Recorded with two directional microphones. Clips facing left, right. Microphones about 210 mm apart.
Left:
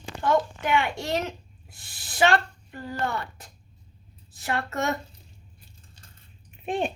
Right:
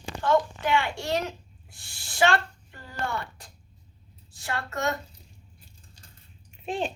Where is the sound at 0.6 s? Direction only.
20° left (ahead or behind).